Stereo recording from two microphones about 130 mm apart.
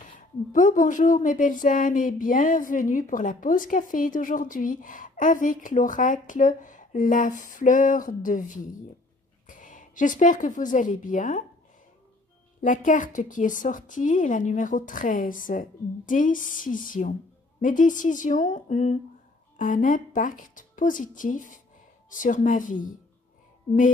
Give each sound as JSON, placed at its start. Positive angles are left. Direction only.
{"t": 0.5, "sound": "a woman's voice", "side_deg": 80}
{"t": 12.6, "sound": "a woman's voice", "side_deg": 85}
{"t": 19.5, "sound": "speech", "side_deg": 85}